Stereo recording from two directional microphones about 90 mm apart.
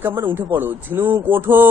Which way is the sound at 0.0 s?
25° right (ahead or behind).